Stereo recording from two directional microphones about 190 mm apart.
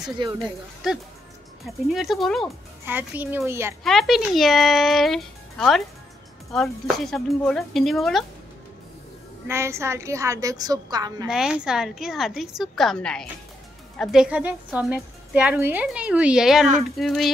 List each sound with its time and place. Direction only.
0.2 s speech: 25° right (ahead or behind)
0.8 s a woman's voice: centre (ahead or behind)
2.8 s a woman's voice: 10° right (ahead or behind)
3.8 s a woman's voice: centre (ahead or behind)
9.5 s a woman's voice: 15° right (ahead or behind)
11.2 s a woman's voice: 5° right (ahead or behind)